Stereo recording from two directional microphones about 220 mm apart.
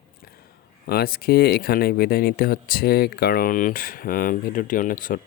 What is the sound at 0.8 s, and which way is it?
Speech, 45° left (ahead or behind).